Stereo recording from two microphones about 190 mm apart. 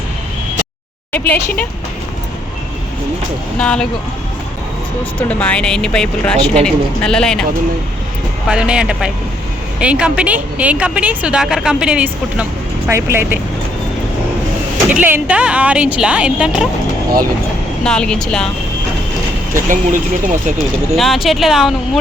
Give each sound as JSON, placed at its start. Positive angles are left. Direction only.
{"t": 1.1, "sound": "a woman's voice", "side_deg": 10}
{"t": 3.6, "sound": "speech", "side_deg": 5}
{"t": 5.3, "sound": "speech", "side_deg": 5}
{"t": 8.4, "sound": "speech", "side_deg": -5}
{"t": 15.0, "sound": "speech", "side_deg": -10}
{"t": 17.8, "sound": "speech", "side_deg": 5}
{"t": 19.6, "sound": "speech", "side_deg": -45}
{"t": 20.9, "sound": "speech", "side_deg": 0}